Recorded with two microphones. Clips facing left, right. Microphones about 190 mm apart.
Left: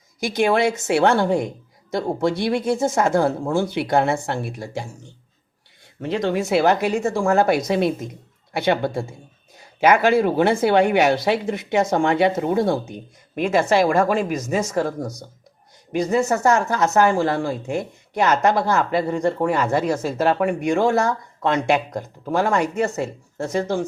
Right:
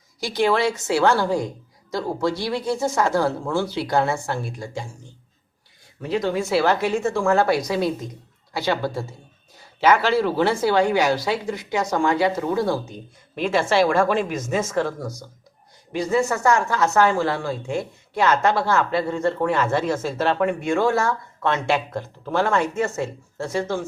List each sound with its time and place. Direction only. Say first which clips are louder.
0.2 s a woman's voice: left 2 dB; 20° left (ahead or behind)
6.0 s a woman's voice: left 1 dB; 25° left (ahead or behind)
9.8 s a man's voice: left 2 dB; 50° left (ahead or behind)
10.6 s a woman's voice: left 3 dB; 20° left (ahead or behind)
12.9 s a woman's voice: left 3 dB; 50° left (ahead or behind)
16.0 s a woman's voice: left 2 dB; 20° left (ahead or behind)